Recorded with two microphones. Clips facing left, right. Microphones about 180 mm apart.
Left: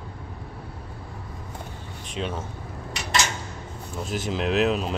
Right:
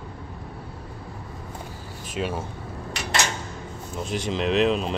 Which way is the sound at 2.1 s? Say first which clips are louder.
Right 2 dB; 10° right (ahead or behind).